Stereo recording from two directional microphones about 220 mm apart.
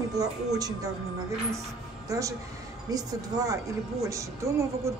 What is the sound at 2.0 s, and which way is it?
A woman's voice, 15° right (ahead or behind).